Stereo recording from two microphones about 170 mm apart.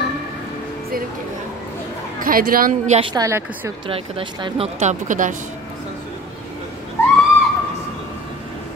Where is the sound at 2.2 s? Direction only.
55° right (ahead or behind).